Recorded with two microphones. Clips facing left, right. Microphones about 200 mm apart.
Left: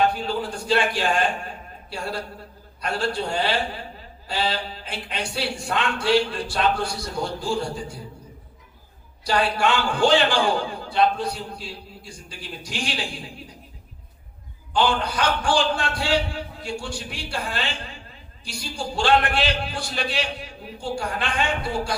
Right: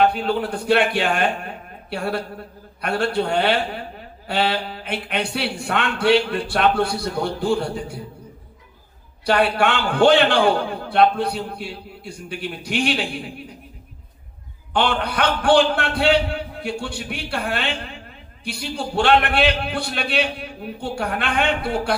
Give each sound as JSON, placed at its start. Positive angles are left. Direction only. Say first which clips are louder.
{"t": 0.0, "sound": "a man's voice", "louder": "right 4 dB", "side_deg": -60}
{"t": 9.2, "sound": "a man's voice", "louder": "right 4 dB", "side_deg": -60}
{"t": 14.7, "sound": "a man's voice", "louder": "right 1 dB", "side_deg": -60}